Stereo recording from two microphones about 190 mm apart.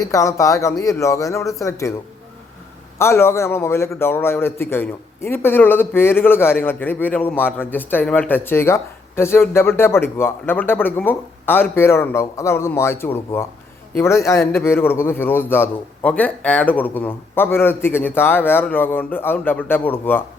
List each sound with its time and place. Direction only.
0.0 s a man's voice: 15° left (ahead or behind)
3.0 s a man's voice: 15° left (ahead or behind)